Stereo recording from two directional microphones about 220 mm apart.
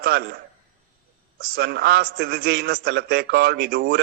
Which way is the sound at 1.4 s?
45° right (ahead or behind).